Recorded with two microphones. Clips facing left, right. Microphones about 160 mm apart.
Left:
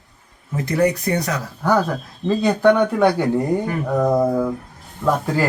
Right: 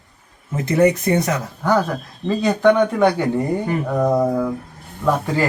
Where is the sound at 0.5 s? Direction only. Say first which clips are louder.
Right 3 dB; 20° right (ahead or behind).